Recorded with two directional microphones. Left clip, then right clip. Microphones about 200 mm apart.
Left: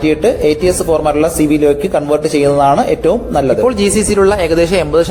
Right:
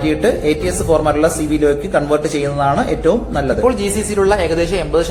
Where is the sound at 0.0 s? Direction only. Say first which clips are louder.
Left 4 dB; 30° left (ahead or behind).